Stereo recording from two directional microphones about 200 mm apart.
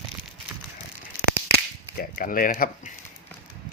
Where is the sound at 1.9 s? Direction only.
45° left (ahead or behind).